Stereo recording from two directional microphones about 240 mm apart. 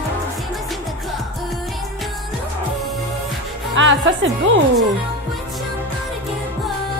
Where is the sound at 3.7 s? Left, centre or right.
Right.